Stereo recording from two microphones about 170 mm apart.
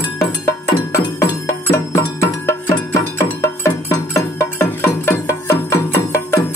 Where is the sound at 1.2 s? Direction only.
15° left (ahead or behind).